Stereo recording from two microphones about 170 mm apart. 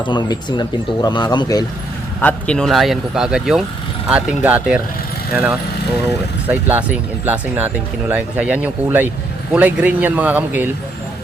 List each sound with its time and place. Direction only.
0.0 s speech: 25° left (ahead or behind)
2.2 s a man's voice: 5° left (ahead or behind)